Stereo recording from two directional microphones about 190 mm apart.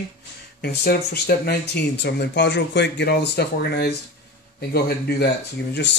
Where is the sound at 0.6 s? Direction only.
60° left (ahead or behind).